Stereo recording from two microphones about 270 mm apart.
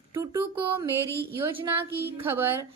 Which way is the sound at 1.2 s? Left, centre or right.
Centre.